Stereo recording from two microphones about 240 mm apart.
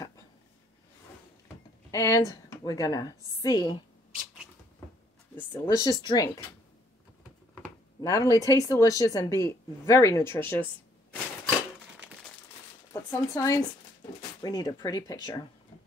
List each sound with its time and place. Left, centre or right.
1.9 s speech: centre
5.3 s speech: centre
8.0 s speech: centre
12.9 s speech: centre